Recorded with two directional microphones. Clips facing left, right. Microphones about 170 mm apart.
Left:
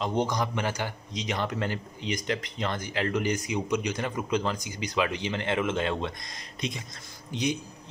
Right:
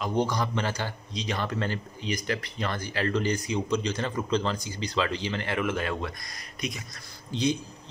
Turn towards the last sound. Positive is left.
turn(degrees=15)  # may be behind; listen again after turning